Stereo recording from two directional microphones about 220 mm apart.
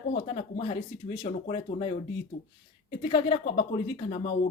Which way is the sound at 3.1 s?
25° left (ahead or behind).